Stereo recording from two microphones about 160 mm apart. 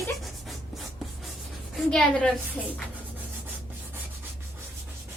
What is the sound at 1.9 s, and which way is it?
Speech, 5° left (ahead or behind).